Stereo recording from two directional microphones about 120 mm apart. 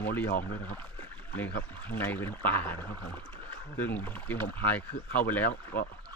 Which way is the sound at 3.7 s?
15° left (ahead or behind).